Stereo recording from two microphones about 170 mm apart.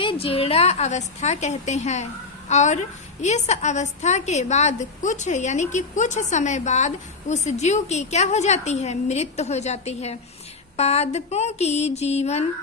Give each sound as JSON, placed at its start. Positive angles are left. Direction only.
{"t": 0.0, "sound": "a woman's voice", "side_deg": 30}